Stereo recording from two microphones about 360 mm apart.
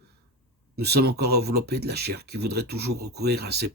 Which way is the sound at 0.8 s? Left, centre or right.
Right.